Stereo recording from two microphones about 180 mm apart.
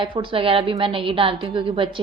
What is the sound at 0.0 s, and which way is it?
A woman's voice, 30° right (ahead or behind).